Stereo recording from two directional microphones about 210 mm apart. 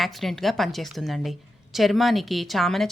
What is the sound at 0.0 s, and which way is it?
A woman's voice, centre (ahead or behind).